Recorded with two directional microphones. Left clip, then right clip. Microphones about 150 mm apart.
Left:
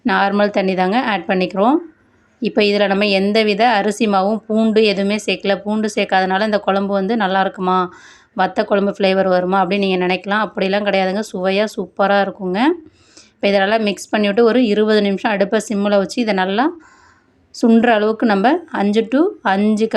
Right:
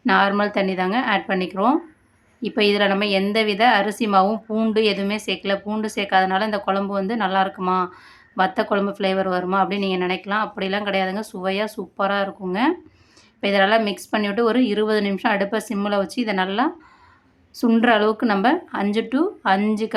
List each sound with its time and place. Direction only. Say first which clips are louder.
0.0 s a woman's voice: left 3 dB; 35° left (ahead or behind)